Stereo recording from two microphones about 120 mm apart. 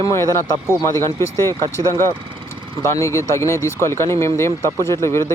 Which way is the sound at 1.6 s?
25° left (ahead or behind).